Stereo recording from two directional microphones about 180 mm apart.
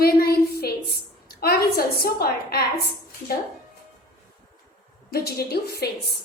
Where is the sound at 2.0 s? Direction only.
60° left (ahead or behind).